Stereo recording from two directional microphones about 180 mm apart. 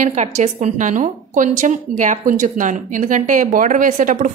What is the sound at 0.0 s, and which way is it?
A woman's voice, 40° right (ahead or behind).